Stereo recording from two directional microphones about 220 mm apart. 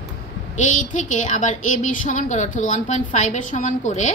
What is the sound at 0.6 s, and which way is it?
Speech, 35° left (ahead or behind).